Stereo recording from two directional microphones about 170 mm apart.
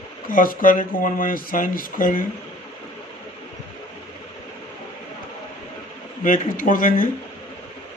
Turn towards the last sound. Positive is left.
turn(degrees=55)  # may be behind; listen again after turning